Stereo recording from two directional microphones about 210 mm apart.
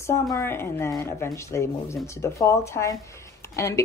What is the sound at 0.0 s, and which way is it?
Speech, 15° left (ahead or behind).